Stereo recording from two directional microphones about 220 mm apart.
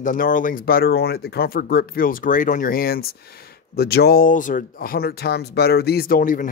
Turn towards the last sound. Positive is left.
turn(degrees=40)  # may be behind; listen again after turning